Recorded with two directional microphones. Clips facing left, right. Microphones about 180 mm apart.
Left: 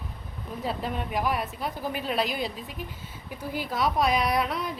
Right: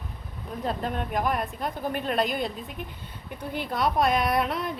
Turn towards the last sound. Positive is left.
turn(degrees=0)  # may be behind; listen again after turning